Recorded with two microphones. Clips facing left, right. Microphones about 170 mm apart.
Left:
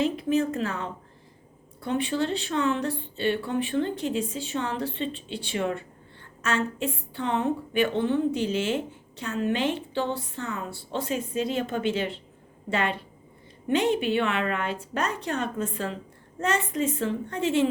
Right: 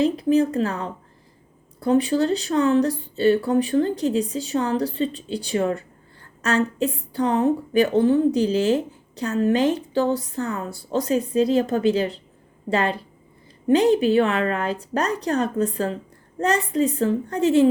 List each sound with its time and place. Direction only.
0.0 s a woman's voice: 35° right (ahead or behind)